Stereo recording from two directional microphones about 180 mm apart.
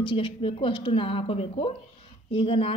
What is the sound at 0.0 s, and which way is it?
A woman's voice, 30° left (ahead or behind).